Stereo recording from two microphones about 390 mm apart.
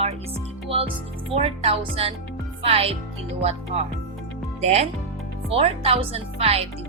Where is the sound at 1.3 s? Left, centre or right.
Centre.